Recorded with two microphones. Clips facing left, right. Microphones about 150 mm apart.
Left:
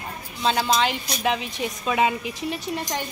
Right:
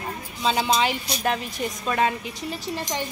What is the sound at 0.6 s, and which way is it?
A woman's voice, 10° right (ahead or behind).